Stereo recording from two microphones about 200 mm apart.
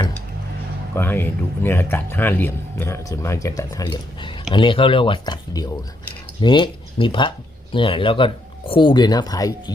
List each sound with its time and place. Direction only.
0.9 s a man's voice: 10° left (ahead or behind)